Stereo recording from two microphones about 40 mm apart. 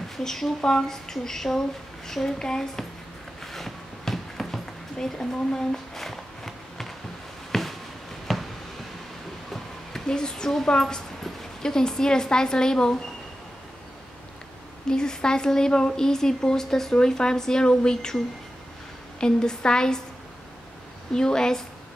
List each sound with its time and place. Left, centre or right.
0.2 s a woman's voice: centre
3.5 s a sound: centre
10.0 s a woman's voice: centre
14.9 s speech: centre
19.1 s a woman's voice: left
21.1 s speech: centre